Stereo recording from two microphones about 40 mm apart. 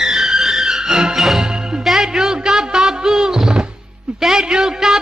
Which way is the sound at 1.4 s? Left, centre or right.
Centre.